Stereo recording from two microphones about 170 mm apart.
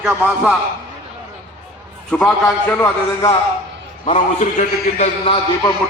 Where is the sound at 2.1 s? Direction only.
5° left (ahead or behind).